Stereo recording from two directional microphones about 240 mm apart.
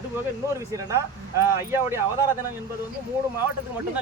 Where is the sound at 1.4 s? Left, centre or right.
Centre.